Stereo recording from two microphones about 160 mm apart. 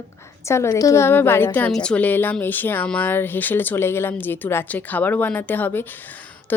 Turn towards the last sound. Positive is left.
turn(degrees=10)  # may be behind; listen again after turning